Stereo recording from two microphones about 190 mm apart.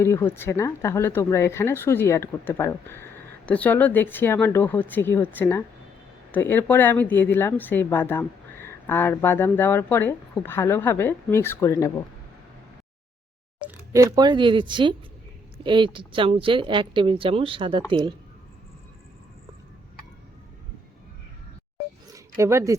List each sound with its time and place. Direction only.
0.0 s speech: 15° left (ahead or behind)
13.6 s a woman's voice: 10° right (ahead or behind)
22.1 s speech: 15° right (ahead or behind)